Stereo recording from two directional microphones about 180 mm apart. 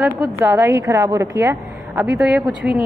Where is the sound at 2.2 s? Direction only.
Centre (ahead or behind).